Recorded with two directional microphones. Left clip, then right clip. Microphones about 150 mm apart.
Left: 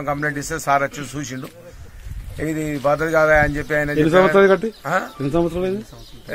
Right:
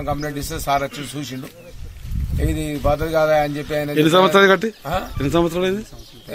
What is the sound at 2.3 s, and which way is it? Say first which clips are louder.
Speech: left 1 dB; 5° right (ahead or behind).